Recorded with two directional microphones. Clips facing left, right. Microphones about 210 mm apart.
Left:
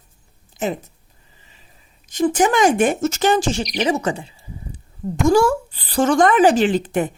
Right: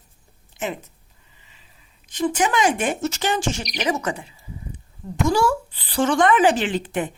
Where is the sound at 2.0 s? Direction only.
45° left (ahead or behind).